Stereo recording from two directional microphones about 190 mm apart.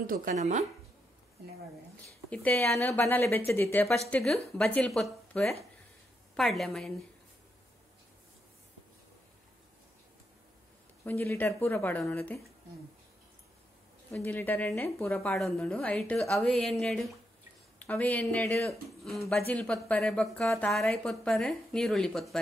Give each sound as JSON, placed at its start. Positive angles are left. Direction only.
{"t": 0.0, "sound": "speech", "side_deg": -45}
{"t": 2.3, "sound": "speech", "side_deg": 10}
{"t": 11.1, "sound": "speech", "side_deg": 10}
{"t": 14.1, "sound": "speech", "side_deg": 10}